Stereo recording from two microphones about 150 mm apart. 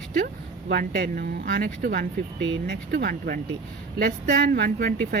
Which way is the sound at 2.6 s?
80° right.